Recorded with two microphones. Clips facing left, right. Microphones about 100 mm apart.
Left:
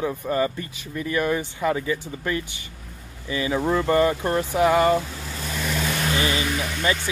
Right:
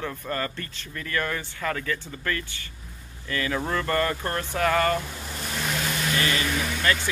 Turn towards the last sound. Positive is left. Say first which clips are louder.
# left 1 dB
turn(degrees=15)  # may be behind; listen again after turning